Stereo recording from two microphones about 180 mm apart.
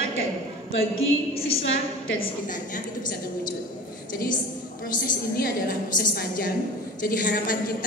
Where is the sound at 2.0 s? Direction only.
90° left.